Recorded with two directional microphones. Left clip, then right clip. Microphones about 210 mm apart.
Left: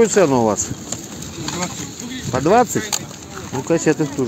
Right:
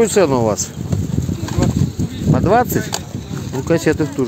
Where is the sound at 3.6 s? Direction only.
30° right (ahead or behind).